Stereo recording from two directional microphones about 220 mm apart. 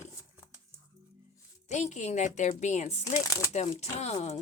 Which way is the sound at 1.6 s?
30° left (ahead or behind).